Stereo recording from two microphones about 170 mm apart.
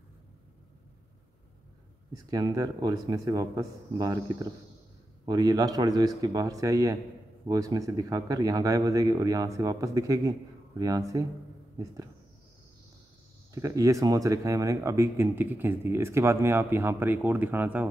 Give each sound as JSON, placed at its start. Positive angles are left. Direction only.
{"t": 2.1, "sound": "speech", "side_deg": -20}
{"t": 13.6, "sound": "speech", "side_deg": -20}